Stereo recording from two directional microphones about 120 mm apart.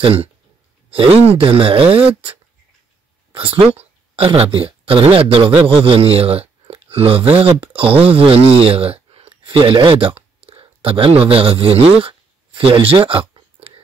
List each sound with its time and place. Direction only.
0.0 s a man's voice: 55° right (ahead or behind)
3.3 s a man's voice: 50° right (ahead or behind)
6.7 s a sound: 55° right (ahead or behind)
7.3 s speech: 50° right (ahead or behind)